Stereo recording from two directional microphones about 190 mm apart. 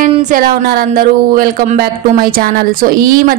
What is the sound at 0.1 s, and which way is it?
A woman's voice, 40° right (ahead or behind).